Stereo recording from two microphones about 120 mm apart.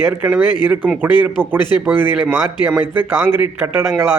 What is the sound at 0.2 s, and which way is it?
A man's voice, 15° right (ahead or behind).